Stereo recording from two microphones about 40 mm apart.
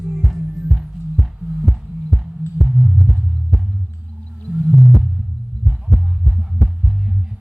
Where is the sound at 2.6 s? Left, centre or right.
Centre.